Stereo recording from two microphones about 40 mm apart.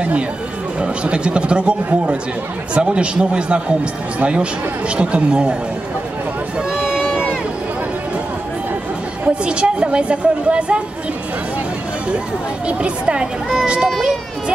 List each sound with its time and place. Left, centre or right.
0.7 s a woman's voice: right
9.3 s a woman's voice: right
12.6 s a woman's voice: right